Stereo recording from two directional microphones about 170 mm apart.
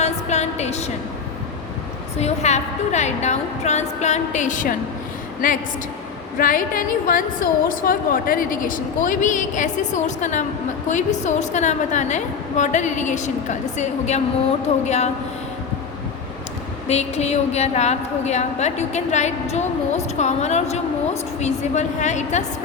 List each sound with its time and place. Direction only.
0.0 s a sound: 40° left (ahead or behind)
2.1 s a woman's voice: 40° left (ahead or behind)
16.9 s a woman's voice: 40° left (ahead or behind)